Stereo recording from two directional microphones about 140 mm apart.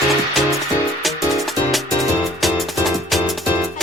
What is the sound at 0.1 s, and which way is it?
Music, centre (ahead or behind).